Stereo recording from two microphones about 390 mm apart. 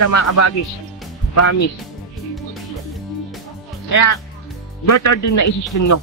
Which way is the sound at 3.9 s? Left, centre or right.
Left.